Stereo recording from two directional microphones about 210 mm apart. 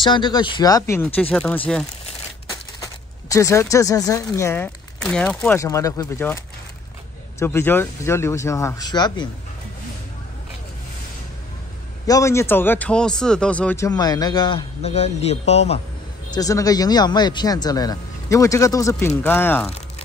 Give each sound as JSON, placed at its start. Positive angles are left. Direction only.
{"t": 0.0, "sound": "speech", "side_deg": 20}
{"t": 2.8, "sound": "speech", "side_deg": 15}
{"t": 5.0, "sound": "a man's voice", "side_deg": 0}
{"t": 12.1, "sound": "a man's voice", "side_deg": 15}
{"t": 16.3, "sound": "a man's voice", "side_deg": 15}